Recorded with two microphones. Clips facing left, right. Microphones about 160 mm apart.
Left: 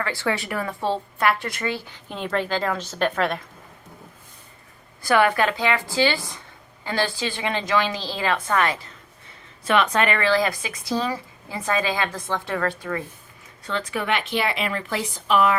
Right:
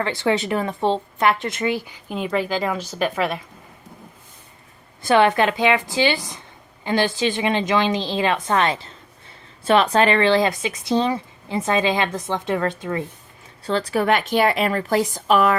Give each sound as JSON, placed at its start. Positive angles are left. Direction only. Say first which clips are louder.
{"t": 0.0, "sound": "a woman's voice", "louder": "right 5 dB", "side_deg": -20}
{"t": 5.0, "sound": "speech", "louder": "right 3 dB", "side_deg": -25}
{"t": 13.7, "sound": "a woman's voice", "louder": "right 6 dB", "side_deg": -35}